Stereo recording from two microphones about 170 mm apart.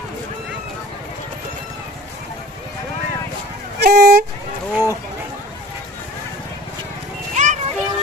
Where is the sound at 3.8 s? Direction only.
75° right (ahead or behind).